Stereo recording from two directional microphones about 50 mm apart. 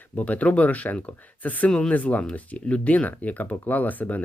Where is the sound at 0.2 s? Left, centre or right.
Left.